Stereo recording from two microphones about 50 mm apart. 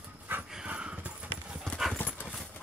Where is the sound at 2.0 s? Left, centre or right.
Left.